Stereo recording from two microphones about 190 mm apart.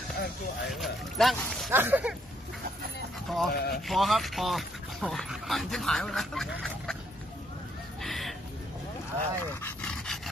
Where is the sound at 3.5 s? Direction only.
55° left (ahead or behind).